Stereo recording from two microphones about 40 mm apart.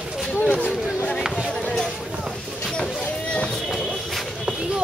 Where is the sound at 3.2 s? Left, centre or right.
Left.